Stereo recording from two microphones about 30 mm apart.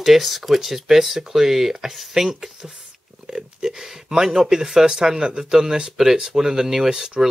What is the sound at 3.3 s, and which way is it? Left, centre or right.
Speech, right.